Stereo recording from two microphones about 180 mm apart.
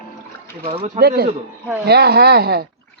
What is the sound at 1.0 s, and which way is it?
Speech, 65° right (ahead or behind).